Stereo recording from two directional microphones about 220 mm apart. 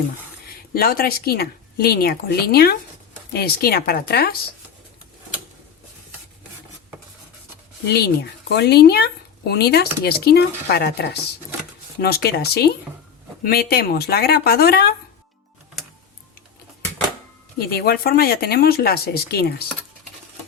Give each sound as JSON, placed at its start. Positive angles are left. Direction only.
{"t": 0.7, "sound": "speech", "side_deg": 45}
{"t": 7.9, "sound": "speech", "side_deg": 45}
{"t": 17.7, "sound": "speech", "side_deg": 45}